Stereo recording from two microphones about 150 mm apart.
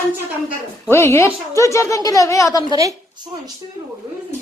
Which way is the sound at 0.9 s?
20° left (ahead or behind).